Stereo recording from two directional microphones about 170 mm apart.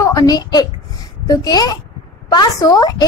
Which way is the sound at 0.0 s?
20° left (ahead or behind).